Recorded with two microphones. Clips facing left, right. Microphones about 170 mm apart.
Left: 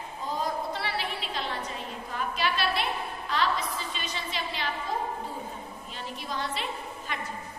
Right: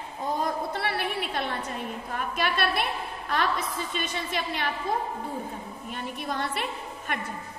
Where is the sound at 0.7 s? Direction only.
55° right (ahead or behind).